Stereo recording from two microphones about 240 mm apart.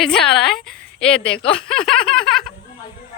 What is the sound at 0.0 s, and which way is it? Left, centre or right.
A woman's voice, centre.